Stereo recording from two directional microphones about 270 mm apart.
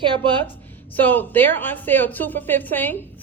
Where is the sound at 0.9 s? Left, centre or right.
Centre.